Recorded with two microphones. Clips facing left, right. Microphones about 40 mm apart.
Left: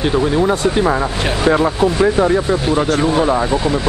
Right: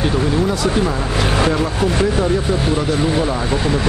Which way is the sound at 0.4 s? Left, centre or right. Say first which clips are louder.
Left 3 dB; left.